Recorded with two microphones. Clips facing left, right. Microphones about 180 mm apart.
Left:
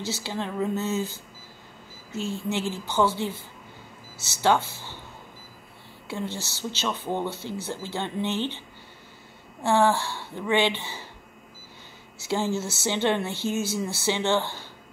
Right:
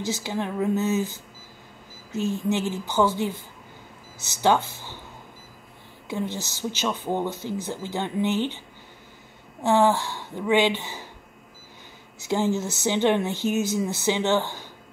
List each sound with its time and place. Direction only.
0.0 s a woman's voice: 15° right (ahead or behind)
6.0 s a woman's voice: 15° right (ahead or behind)
9.6 s a woman's voice: 15° right (ahead or behind)
12.2 s a woman's voice: 15° right (ahead or behind)